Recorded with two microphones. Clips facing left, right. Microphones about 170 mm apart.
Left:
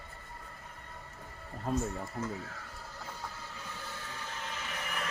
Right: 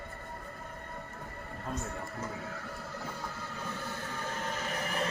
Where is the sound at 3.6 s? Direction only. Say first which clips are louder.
Right 9 dB; 50° right (ahead or behind).